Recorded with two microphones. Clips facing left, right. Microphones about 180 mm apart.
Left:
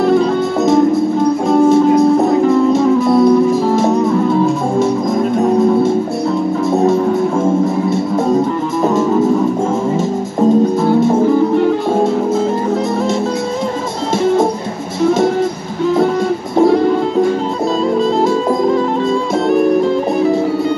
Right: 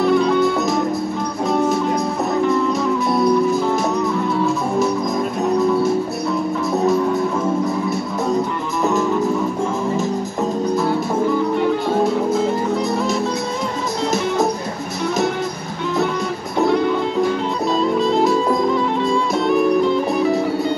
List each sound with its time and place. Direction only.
0.0 s music: 25° left (ahead or behind)
5.4 s music: 25° left (ahead or behind)
14.2 s music: 25° left (ahead or behind)